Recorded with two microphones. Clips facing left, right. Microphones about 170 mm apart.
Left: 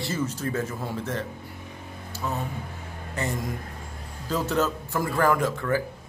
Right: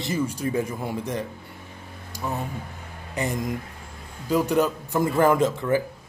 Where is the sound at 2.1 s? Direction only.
15° right (ahead or behind).